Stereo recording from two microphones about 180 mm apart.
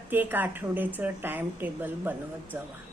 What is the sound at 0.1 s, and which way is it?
A woman's voice, 10° right (ahead or behind).